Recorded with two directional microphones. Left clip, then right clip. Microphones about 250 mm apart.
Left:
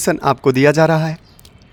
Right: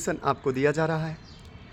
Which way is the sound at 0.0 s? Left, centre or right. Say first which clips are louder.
Left 11 dB; left.